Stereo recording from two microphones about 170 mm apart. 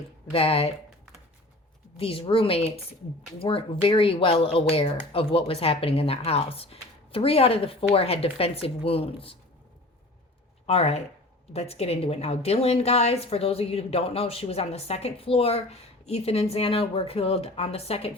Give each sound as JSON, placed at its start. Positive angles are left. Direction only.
{"t": 0.3, "sound": "a woman's voice", "side_deg": 35}
{"t": 2.0, "sound": "a woman's voice", "side_deg": 35}
{"t": 10.7, "sound": "a woman's voice", "side_deg": 35}